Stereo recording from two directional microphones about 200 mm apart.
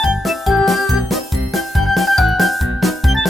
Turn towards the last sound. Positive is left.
turn(degrees=0)  # may be behind; listen again after turning